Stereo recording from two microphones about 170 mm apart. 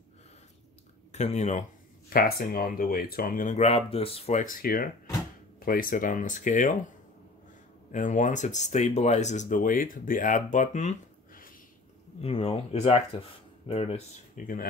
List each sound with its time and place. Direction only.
1.1 s speech: 40° left (ahead or behind)
2.0 s speech: 60° left (ahead or behind)
7.9 s speech: 45° left (ahead or behind)
12.2 s speech: 35° left (ahead or behind)